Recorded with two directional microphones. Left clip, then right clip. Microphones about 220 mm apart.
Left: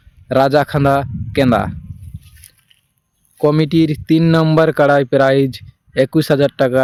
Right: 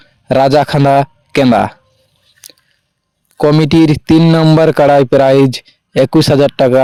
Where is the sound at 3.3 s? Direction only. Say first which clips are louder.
Right 5 dB; 35° right (ahead or behind).